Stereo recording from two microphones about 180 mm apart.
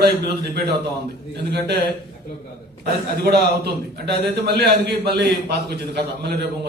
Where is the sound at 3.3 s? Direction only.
65° right (ahead or behind).